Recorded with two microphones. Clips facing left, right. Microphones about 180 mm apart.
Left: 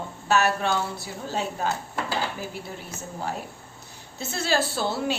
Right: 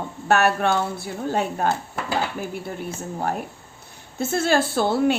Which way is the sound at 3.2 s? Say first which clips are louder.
Right 4 dB; 55° right (ahead or behind).